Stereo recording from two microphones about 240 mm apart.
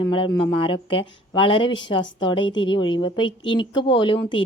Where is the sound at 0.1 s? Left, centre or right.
Left.